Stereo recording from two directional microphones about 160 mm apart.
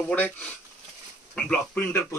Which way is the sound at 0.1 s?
10° left (ahead or behind).